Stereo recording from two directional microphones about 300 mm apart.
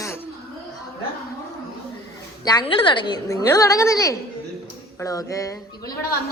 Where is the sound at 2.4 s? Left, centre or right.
Centre.